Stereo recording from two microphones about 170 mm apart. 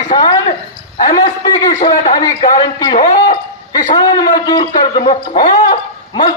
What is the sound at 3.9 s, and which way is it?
Speech, 25° left (ahead or behind).